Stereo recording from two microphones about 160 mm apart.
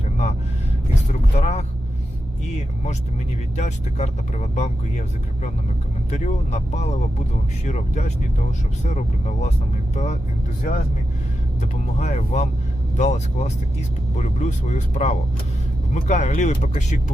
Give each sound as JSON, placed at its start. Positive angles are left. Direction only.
{"t": 1.4, "sound": "vehicle", "side_deg": 45}
{"t": 3.6, "sound": "speech", "side_deg": 45}